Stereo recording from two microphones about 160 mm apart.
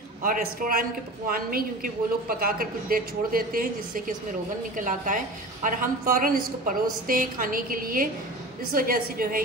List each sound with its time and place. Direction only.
0.2 s a woman's voice: 60° right (ahead or behind)